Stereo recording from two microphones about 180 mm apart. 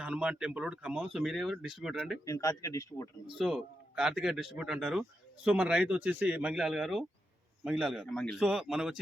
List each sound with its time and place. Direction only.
0.0 s speech: 5° right (ahead or behind)
2.2 s a man's voice: 20° left (ahead or behind)
3.3 s speech: 5° right (ahead or behind)